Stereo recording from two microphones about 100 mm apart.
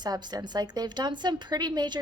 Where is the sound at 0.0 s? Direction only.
45° right (ahead or behind).